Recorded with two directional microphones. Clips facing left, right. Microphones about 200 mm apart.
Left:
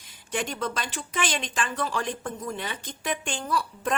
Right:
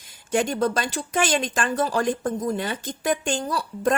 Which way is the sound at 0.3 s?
45° right (ahead or behind).